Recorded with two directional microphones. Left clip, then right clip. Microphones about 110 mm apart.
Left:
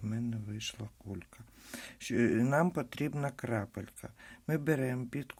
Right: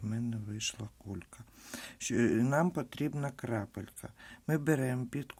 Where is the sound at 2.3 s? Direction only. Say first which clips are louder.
Left 1 dB; 15° right (ahead or behind).